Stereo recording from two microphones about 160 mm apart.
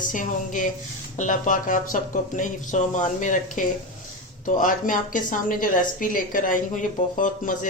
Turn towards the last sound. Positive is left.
turn(degrees=55)  # may be behind; listen again after turning